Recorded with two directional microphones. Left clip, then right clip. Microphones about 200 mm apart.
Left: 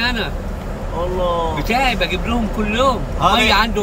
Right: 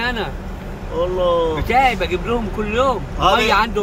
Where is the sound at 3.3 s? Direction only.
10° right (ahead or behind).